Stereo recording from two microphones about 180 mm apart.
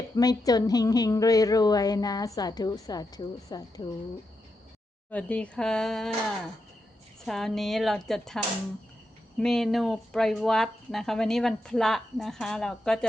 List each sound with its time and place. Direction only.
0.2 s a woman's voice: 20° left (ahead or behind)
5.1 s a woman's voice: 5° left (ahead or behind)
7.3 s a woman's voice: centre (ahead or behind)
9.4 s a woman's voice: centre (ahead or behind)